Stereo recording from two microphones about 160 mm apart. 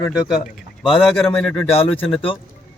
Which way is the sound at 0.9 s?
Centre (ahead or behind).